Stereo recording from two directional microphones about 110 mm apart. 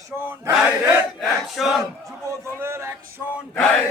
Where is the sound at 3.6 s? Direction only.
10° left (ahead or behind).